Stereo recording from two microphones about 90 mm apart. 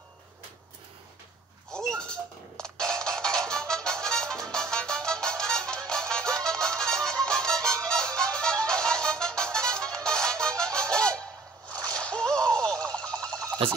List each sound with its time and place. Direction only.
1.7 s music: 10° left (ahead or behind)
11.7 s splash: 45° right (ahead or behind)
12.0 s a sound: 10° left (ahead or behind)
13.6 s speech: 90° right